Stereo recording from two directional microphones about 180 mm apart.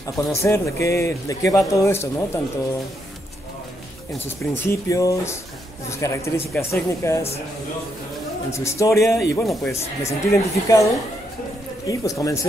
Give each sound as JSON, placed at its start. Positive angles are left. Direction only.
{"t": 0.3, "sound": "speech", "side_deg": 15}
{"t": 4.4, "sound": "speech", "side_deg": 15}
{"t": 8.5, "sound": "speech", "side_deg": 15}
{"t": 11.9, "sound": "speech", "side_deg": 20}